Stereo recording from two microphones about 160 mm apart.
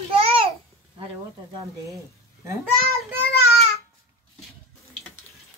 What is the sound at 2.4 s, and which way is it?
Speech, 20° right (ahead or behind).